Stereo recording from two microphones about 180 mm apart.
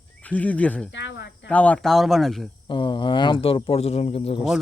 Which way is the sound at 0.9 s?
80° left.